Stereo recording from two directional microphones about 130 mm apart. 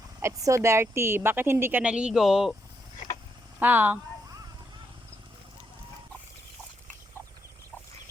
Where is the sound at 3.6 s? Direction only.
15° right (ahead or behind).